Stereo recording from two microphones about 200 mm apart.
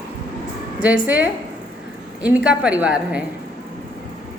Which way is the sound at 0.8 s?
5° right (ahead or behind).